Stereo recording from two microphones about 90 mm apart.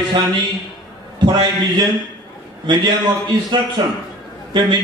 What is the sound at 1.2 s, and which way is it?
A man's voice, 55° right (ahead or behind).